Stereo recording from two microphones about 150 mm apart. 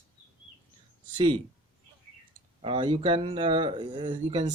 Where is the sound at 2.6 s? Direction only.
35° right (ahead or behind).